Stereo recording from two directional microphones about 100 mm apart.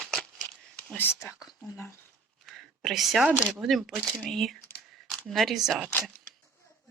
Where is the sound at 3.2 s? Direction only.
15° right (ahead or behind).